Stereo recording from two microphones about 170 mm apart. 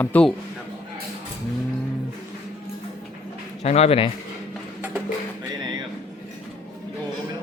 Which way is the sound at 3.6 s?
35° left (ahead or behind).